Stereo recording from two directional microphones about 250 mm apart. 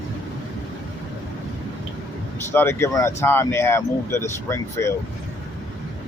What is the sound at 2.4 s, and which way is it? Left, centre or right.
Speech, centre.